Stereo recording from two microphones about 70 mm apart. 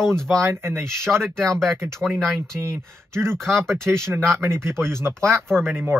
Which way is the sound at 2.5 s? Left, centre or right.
Right.